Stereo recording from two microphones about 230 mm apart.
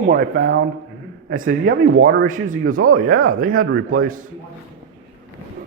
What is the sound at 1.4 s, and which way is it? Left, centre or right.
Speech, right.